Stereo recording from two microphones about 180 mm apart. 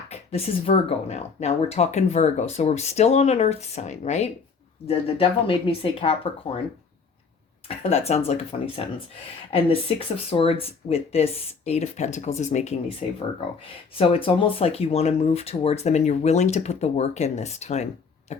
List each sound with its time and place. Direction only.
0.1 s speech: 35° left (ahead or behind)
7.8 s speech: 35° left (ahead or behind)
18.3 s a sound: 40° left (ahead or behind)